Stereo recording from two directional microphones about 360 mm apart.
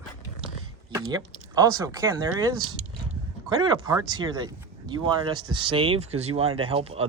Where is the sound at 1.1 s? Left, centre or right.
Centre.